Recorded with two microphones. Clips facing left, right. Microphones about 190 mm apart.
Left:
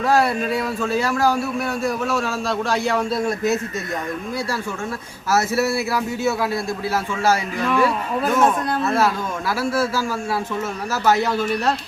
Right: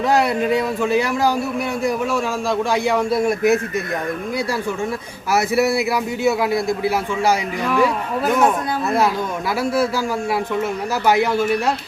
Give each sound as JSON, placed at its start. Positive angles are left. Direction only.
{"t": 0.1, "sound": "a man's voice", "side_deg": -20}
{"t": 5.3, "sound": "a man's voice", "side_deg": -15}
{"t": 11.0, "sound": "a man's voice", "side_deg": -10}